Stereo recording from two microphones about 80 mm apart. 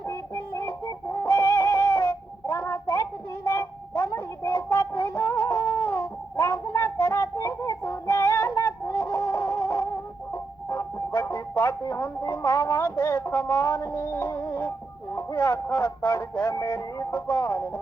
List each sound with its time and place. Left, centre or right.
0.1 s music: left
2.0 s child singing: left
3.4 s a sound: left
4.7 s music: left
7.9 s a sound: left
9.6 s chicken: left
10.3 s music: left
13.3 s music: left
13.7 s music: left
16.0 s music: left
16.7 s music: left